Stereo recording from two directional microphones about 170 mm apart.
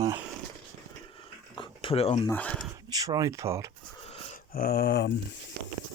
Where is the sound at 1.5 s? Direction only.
30° left (ahead or behind).